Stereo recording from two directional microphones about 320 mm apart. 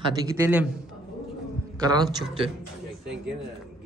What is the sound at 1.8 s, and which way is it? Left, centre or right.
Speech, centre.